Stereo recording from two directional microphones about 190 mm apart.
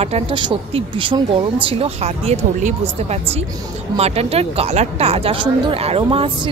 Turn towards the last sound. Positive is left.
turn(degrees=-30)  # may be behind; listen again after turning